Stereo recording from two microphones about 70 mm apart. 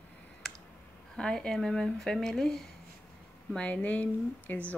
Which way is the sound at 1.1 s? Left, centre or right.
Centre.